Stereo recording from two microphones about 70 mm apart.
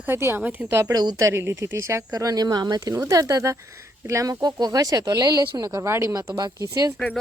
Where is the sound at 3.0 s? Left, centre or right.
Right.